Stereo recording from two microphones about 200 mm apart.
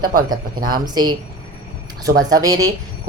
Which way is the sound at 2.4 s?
20° right (ahead or behind).